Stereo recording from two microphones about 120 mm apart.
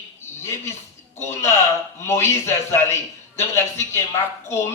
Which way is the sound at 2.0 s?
20° left (ahead or behind).